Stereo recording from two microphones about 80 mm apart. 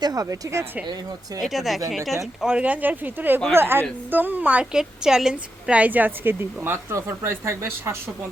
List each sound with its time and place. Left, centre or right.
0.0 s speech: right
1.4 s speech: centre
2.4 s a woman's voice: centre; by 7.9 s right